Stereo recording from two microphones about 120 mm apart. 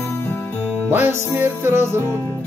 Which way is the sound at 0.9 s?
15° right (ahead or behind).